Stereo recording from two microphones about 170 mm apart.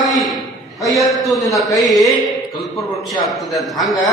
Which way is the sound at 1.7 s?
20° left (ahead or behind).